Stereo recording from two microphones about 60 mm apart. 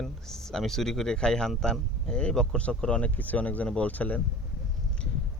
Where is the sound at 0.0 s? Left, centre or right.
Centre; by 4.2 s left.